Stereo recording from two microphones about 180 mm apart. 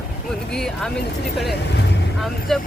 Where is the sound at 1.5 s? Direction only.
70° left (ahead or behind).